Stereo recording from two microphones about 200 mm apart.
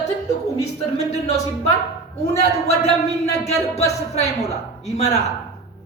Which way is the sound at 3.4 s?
35° left (ahead or behind).